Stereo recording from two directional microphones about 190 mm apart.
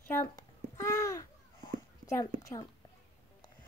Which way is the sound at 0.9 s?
15° left (ahead or behind).